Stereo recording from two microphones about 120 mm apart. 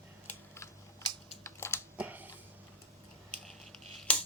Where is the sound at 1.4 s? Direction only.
20° left (ahead or behind).